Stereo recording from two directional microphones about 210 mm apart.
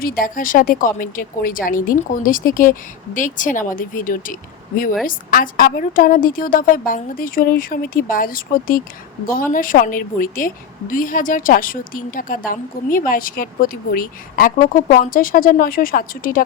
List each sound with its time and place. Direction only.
0.0 s a woman's voice: 45° left (ahead or behind)